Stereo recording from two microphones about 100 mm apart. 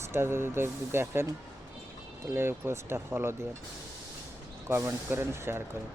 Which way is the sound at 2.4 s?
25° right (ahead or behind).